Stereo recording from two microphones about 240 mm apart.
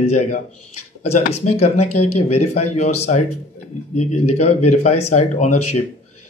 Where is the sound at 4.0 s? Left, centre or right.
Left.